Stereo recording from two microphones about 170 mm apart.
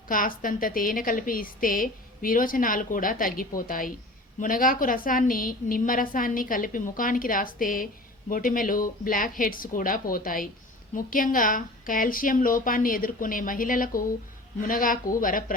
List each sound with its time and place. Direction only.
0.1 s a woman's voice: 55° left (ahead or behind)